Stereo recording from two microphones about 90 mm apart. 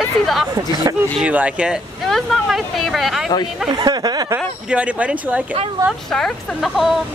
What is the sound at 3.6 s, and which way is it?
Speech, 50° right (ahead or behind).